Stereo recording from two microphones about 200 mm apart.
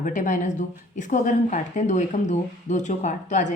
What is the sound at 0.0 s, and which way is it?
Speech, 40° left (ahead or behind).